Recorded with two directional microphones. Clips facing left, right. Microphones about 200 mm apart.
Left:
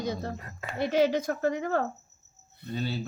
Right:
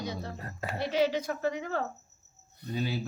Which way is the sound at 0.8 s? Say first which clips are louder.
Left 4 dB; 50° left (ahead or behind).